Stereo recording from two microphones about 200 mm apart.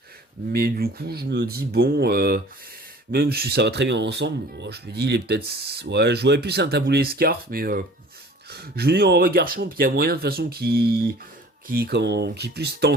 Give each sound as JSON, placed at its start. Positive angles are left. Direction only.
{"t": 0.5, "sound": "speech", "side_deg": -50}